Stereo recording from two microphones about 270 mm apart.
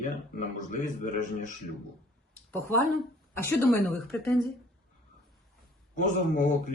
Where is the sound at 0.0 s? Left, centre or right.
Left.